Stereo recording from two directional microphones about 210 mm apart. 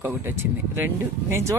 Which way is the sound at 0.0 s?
10° right (ahead or behind).